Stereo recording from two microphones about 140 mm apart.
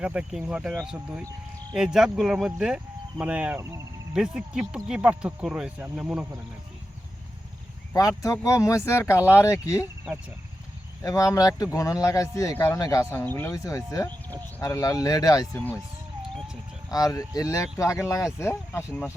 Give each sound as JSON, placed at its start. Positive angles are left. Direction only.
{"t": 0.0, "sound": "speech", "side_deg": -10}
{"t": 3.6, "sound": "speech", "side_deg": -20}
{"t": 4.1, "sound": "speech", "side_deg": -5}
{"t": 7.9, "sound": "speech", "side_deg": 25}
{"t": 11.0, "sound": "speech", "side_deg": 25}
{"t": 16.9, "sound": "speech", "side_deg": 25}